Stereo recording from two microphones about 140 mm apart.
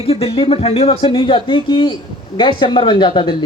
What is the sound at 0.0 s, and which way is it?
Speech, 45° left (ahead or behind).